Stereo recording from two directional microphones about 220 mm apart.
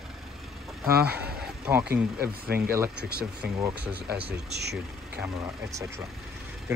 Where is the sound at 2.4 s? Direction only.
45° right (ahead or behind).